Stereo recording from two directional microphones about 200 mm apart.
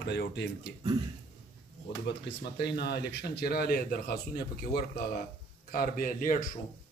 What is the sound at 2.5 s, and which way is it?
Speech, 55° left (ahead or behind).